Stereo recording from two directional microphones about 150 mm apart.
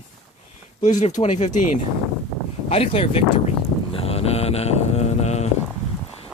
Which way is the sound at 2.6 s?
40° left (ahead or behind).